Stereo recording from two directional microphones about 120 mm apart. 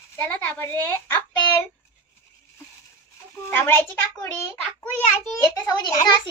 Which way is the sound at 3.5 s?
20° left (ahead or behind).